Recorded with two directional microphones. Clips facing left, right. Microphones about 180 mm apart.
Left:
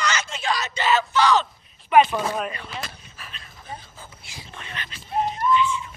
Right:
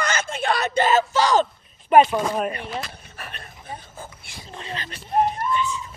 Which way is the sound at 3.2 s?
60° right (ahead or behind).